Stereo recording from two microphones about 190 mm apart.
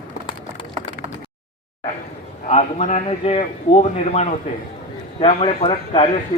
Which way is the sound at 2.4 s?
40° left (ahead or behind).